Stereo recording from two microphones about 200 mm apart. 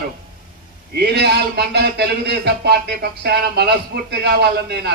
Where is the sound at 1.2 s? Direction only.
55° right (ahead or behind).